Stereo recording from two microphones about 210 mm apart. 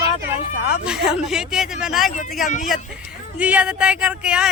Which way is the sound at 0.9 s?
5° right (ahead or behind).